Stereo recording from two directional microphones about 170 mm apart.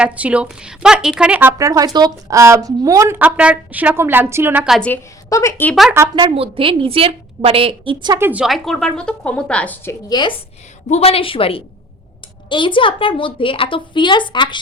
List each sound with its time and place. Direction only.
0.0 s a woman's voice: 10° right (ahead or behind)
5.3 s a woman's voice: 15° left (ahead or behind)
6.1 s a woman's voice: 30° right (ahead or behind)
8.3 s a woman's voice: 5° right (ahead or behind)
10.1 s a woman's voice: 25° left (ahead or behind)
10.8 s a woman's voice: 40° left (ahead or behind)